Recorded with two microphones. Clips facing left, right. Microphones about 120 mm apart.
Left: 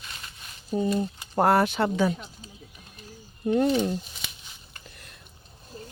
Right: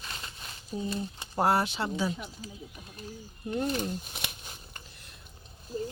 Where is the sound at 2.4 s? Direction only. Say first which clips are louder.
Right 4 dB; 30° left (ahead or behind).